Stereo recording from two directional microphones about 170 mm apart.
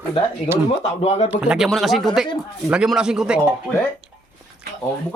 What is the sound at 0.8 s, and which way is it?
Speech, 40° left (ahead or behind).